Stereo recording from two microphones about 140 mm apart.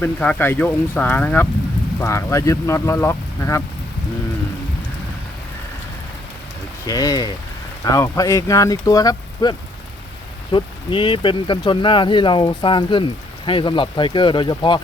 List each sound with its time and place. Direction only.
0.0 s speech: 10° left (ahead or behind)
6.8 s speech: 25° left (ahead or behind)